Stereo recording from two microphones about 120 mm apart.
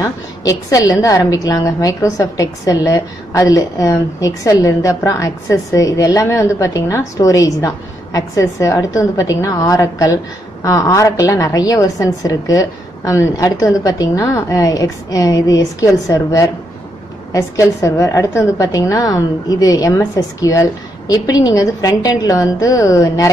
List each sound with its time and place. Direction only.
0.0 s a woman's voice: 30° left (ahead or behind)